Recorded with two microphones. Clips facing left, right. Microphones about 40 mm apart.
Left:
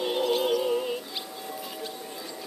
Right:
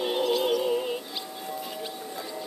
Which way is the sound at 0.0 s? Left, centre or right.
Centre.